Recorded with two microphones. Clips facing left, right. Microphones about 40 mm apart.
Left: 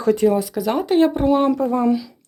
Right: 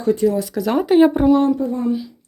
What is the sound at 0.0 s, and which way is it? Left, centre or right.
Speech, left.